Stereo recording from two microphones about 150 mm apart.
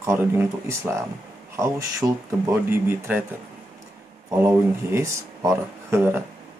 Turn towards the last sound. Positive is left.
turn(degrees=-15)  # may be behind; listen again after turning